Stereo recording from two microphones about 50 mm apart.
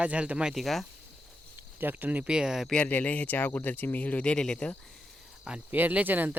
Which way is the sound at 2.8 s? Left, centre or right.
Left.